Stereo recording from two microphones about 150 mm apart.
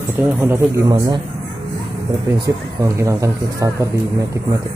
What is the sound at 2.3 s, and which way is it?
Speech, 20° right (ahead or behind).